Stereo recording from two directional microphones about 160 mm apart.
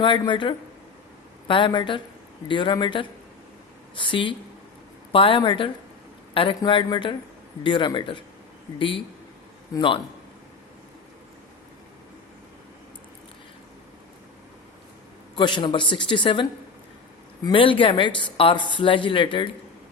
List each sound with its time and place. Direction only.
0.0 s speech: 30° left (ahead or behind)
9.7 s speech: 30° left (ahead or behind)
15.4 s speech: 30° left (ahead or behind)